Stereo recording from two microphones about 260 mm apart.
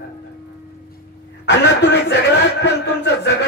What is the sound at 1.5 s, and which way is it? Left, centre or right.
A man's voice, left.